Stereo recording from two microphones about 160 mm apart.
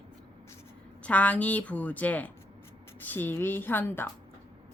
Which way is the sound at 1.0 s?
10° left (ahead or behind).